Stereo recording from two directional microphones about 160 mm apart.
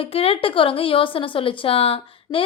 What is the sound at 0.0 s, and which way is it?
A woman's voice, 35° left (ahead or behind).